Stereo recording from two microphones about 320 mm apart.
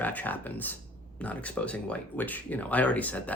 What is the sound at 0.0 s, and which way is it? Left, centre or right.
Speech, centre.